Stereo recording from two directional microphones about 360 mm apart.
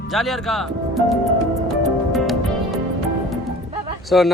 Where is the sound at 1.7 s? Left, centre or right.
Centre.